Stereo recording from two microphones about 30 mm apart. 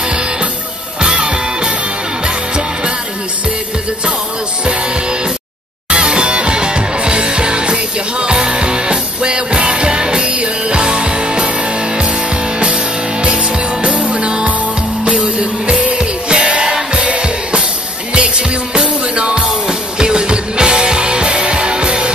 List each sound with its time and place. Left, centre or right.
1.1 s music: right
5.9 s music: right
10.2 s music: right
13.8 s music: right
16.6 s music: right
17.0 s music: right